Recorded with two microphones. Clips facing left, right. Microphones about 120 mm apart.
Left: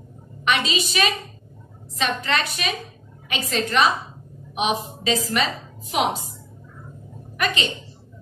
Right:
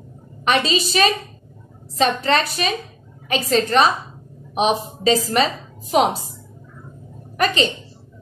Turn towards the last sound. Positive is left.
turn(degrees=-35)  # may be behind; listen again after turning